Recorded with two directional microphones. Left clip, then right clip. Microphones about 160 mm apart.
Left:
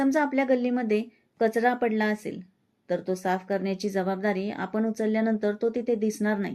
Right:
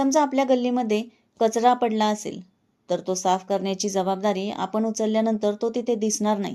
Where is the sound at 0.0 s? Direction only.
25° right (ahead or behind).